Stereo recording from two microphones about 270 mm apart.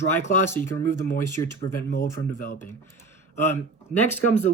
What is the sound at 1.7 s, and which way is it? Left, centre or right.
Speech, left.